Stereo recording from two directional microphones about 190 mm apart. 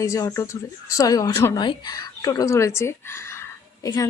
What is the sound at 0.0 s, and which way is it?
A woman's voice, 15° left (ahead or behind).